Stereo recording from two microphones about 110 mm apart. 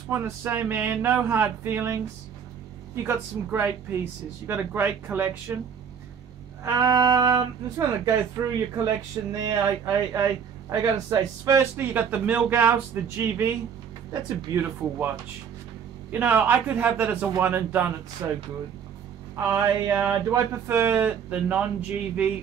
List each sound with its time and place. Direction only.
0.1 s speech: 20° right (ahead or behind)
3.0 s speech: 20° right (ahead or behind)
6.6 s music: 35° right (ahead or behind)
8.4 s speech: 25° right (ahead or behind)
14.5 s speech: 20° right (ahead or behind)
19.3 s speech: 25° right (ahead or behind); by 22.3 s 10° right (ahead or behind)